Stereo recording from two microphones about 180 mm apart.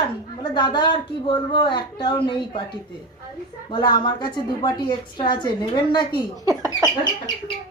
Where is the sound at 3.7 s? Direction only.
25° left (ahead or behind).